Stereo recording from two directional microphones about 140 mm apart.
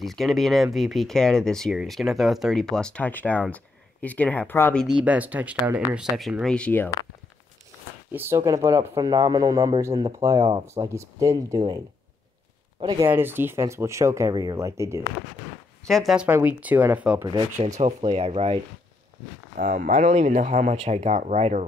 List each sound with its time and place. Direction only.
0.0 s speech: centre (ahead or behind)
4.9 s speech: 10° right (ahead or behind)
6.4 s speech: 10° left (ahead or behind)
8.1 s speech: 15° right (ahead or behind)
12.8 s speech: 25° right (ahead or behind)
13.1 s speech: 15° right (ahead or behind)
15.8 s speech: centre (ahead or behind)
16.3 s speech: 15° right (ahead or behind)
17.2 s speech: 30° right (ahead or behind)
17.7 s speech: 50° right (ahead or behind)
19.6 s speech: 80° right; by 21.6 s 55° right (ahead or behind)